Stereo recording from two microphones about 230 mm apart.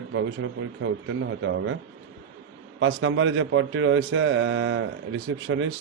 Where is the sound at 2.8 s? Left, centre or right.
Right.